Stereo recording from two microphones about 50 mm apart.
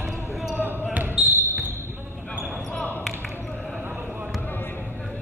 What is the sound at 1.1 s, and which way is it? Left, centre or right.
Basketball bounce, right.